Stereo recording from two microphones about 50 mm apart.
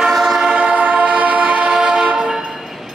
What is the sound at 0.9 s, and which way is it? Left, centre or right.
Train, right.